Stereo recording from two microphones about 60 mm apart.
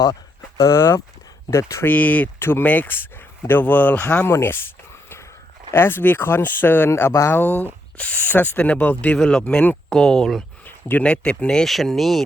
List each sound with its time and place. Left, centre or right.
0.0 s speech: left
1.8 s speech: left
2.4 s speech: left
4.3 s speech: left
5.7 s speech: left
9.1 s speech: centre
10.7 s a sound: left
11.0 s speech: centre
11.6 s speech: centre